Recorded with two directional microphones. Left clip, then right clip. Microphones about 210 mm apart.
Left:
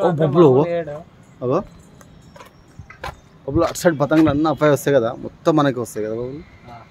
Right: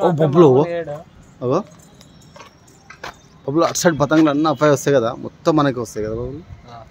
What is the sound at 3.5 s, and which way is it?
Speech, 15° right (ahead or behind).